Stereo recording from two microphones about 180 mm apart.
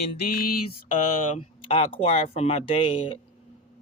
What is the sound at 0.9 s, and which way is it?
Speech, 30° left (ahead or behind).